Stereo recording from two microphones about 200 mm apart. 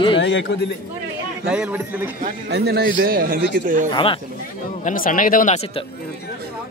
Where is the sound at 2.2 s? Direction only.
55° right (ahead or behind).